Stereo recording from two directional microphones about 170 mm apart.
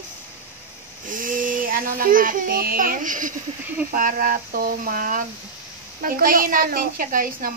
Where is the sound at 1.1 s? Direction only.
55° right (ahead or behind).